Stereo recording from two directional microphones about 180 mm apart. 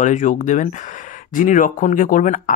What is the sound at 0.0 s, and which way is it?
Speech, 45° left (ahead or behind).